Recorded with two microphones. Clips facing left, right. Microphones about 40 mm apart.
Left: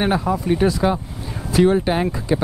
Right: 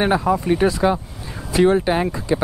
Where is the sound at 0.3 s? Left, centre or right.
Centre.